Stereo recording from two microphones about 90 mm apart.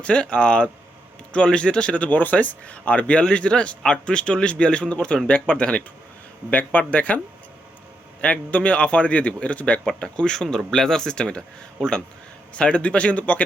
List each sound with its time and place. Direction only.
0.0 s speech: 10° left (ahead or behind)
8.2 s speech: 15° left (ahead or behind)